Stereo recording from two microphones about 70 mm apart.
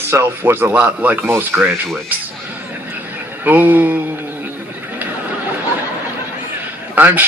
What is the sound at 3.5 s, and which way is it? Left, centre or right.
Speech, right.